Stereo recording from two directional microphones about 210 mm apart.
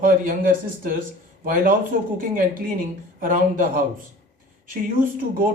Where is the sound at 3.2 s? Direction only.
40° right (ahead or behind).